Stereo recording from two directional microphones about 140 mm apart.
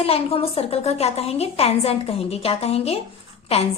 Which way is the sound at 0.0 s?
45° left (ahead or behind).